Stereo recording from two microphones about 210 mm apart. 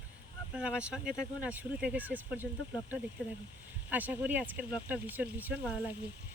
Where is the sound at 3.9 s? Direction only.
10° right (ahead or behind).